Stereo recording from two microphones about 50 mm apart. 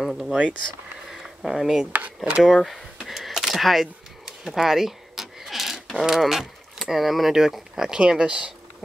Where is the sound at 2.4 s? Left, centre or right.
Centre.